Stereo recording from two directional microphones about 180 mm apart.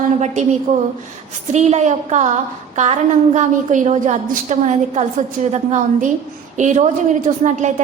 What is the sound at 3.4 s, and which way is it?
A woman's voice, 40° right (ahead or behind).